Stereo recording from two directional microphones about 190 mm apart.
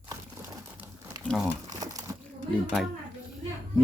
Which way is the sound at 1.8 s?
20° right (ahead or behind).